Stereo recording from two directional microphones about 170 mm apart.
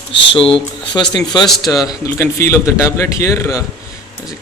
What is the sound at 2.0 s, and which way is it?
A man's voice, 15° left (ahead or behind).